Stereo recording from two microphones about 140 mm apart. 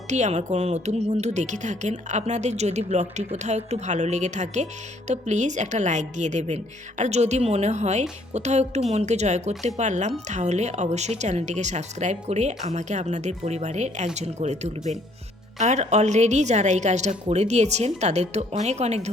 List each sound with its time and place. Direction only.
0.1 s a woman's voice: 55° right (ahead or behind)